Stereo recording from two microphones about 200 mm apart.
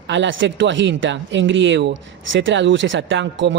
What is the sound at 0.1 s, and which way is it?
Speech, 70° right (ahead or behind).